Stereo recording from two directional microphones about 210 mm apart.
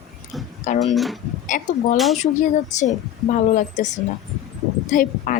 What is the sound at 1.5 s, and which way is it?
A woman's voice, 40° left (ahead or behind).